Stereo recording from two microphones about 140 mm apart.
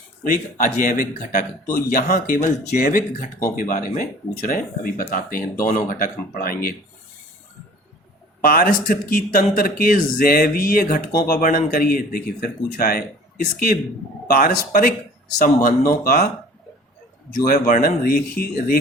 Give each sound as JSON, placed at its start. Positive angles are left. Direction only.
{"t": 0.5, "sound": "speech", "side_deg": 65}
{"t": 8.4, "sound": "a man's voice", "side_deg": 90}
{"t": 17.4, "sound": "speech", "side_deg": 90}